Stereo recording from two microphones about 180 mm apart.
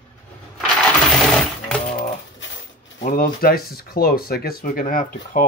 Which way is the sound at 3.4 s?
55° left (ahead or behind).